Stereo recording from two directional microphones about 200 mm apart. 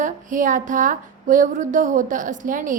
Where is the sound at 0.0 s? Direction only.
40° right (ahead or behind).